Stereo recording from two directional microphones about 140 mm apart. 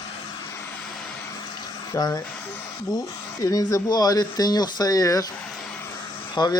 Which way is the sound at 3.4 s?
25° left (ahead or behind).